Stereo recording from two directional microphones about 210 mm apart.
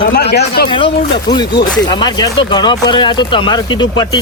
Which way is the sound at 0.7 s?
20° left (ahead or behind).